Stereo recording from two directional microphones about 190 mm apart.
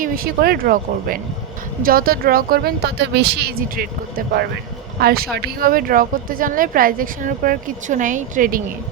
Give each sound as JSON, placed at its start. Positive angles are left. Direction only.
{"t": 0.0, "sound": "a woman's voice", "side_deg": -50}
{"t": 4.9, "sound": "a woman's voice", "side_deg": -55}